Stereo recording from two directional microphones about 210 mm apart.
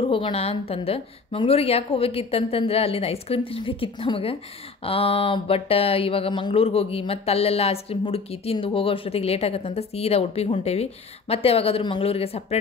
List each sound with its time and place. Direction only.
0.1 s speech: 25° left (ahead or behind)